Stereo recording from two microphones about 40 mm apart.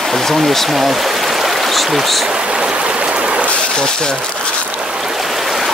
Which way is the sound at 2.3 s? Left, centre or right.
Right.